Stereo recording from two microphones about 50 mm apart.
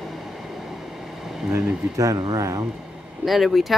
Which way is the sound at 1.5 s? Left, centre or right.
Right.